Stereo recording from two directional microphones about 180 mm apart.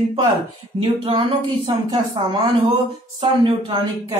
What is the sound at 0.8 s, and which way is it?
Speech, 30° right (ahead or behind).